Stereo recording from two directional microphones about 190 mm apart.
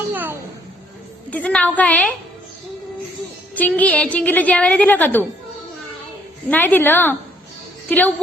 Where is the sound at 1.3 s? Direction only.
5° left (ahead or behind).